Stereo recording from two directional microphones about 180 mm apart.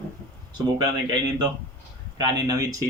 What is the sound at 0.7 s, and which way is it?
Speech, 20° right (ahead or behind).